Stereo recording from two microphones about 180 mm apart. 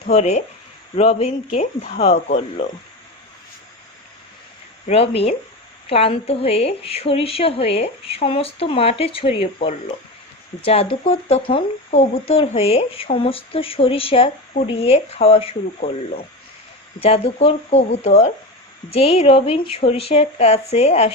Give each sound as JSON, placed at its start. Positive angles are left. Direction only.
{"t": 0.1, "sound": "speech", "side_deg": 40}
{"t": 4.9, "sound": "speech", "side_deg": 35}